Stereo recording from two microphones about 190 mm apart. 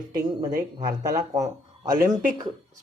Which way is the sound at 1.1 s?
20° right (ahead or behind).